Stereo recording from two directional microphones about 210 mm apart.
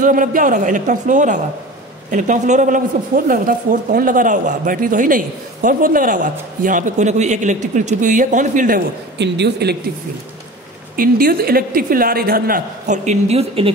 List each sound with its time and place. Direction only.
0.0 s a woman's voice: 40° right (ahead or behind)
9.2 s a woman's voice: 50° right (ahead or behind)
11.0 s a woman's voice: 45° right (ahead or behind)